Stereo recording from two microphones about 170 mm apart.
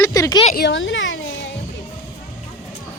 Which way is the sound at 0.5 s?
90° left.